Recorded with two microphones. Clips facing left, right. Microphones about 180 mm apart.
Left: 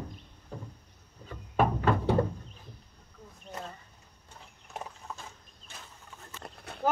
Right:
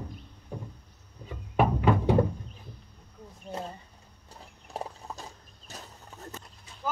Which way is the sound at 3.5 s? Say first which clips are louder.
Right 5 dB; 30° right (ahead or behind).